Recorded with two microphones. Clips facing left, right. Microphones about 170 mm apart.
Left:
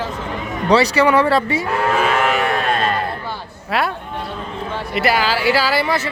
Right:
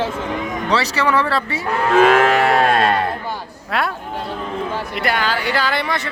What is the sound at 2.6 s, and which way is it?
Sheep, 50° right (ahead or behind).